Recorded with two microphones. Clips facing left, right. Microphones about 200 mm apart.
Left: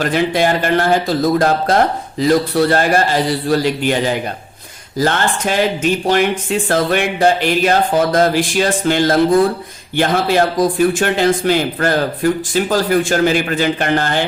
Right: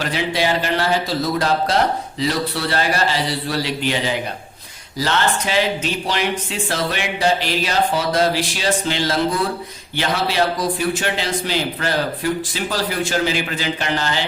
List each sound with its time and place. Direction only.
0.0 s speech: 50° left (ahead or behind)